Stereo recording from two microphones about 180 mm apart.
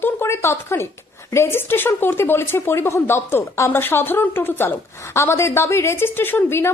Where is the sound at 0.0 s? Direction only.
10° left (ahead or behind).